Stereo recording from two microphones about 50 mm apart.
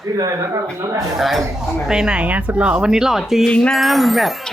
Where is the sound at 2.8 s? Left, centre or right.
Centre.